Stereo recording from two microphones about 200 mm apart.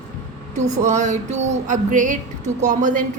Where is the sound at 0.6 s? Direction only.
35° right (ahead or behind).